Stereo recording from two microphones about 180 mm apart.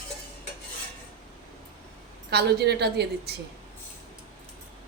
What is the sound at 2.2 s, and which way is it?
A woman's voice, 65° right (ahead or behind).